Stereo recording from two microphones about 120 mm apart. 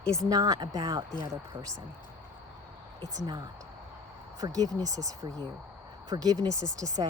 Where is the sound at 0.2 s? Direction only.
35° right (ahead or behind).